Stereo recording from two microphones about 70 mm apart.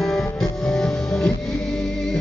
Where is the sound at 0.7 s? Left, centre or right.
Centre.